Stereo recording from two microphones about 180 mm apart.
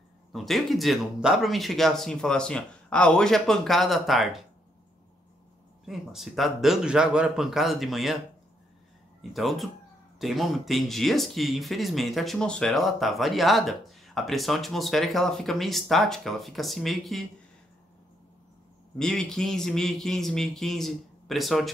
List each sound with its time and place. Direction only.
0.3 s speech: centre (ahead or behind)
5.9 s speech: centre (ahead or behind)
9.2 s speech: centre (ahead or behind)
18.9 s speech: centre (ahead or behind)